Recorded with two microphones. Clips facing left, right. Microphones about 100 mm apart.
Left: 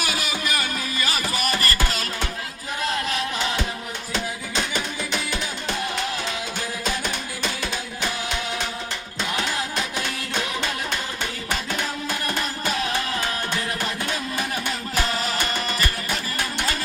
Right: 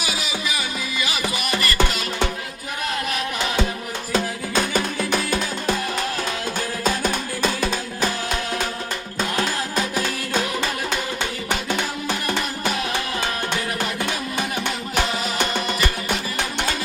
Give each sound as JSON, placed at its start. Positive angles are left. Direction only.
{"t": 0.1, "sound": "music", "side_deg": 50}